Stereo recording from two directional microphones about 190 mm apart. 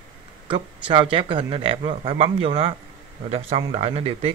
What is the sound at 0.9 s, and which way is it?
Speech, 25° right (ahead or behind).